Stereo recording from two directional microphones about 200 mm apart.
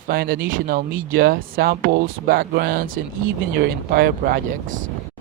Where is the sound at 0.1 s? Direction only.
45° right (ahead or behind).